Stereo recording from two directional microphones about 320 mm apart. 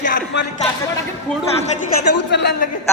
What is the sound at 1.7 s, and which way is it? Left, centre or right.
Speech, left.